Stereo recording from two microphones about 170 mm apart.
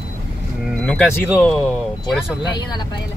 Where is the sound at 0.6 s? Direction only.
5° left (ahead or behind).